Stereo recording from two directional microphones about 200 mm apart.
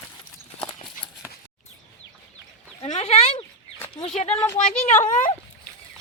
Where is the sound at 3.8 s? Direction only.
20° left (ahead or behind).